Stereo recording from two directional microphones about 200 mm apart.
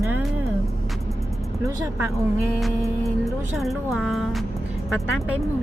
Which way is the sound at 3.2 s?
Centre (ahead or behind).